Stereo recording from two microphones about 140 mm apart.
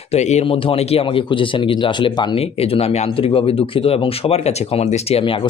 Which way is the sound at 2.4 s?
45° left (ahead or behind).